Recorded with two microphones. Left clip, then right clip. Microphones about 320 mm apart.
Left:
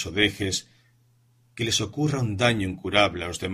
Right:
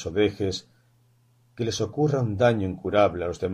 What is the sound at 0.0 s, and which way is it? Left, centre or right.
Speech, left.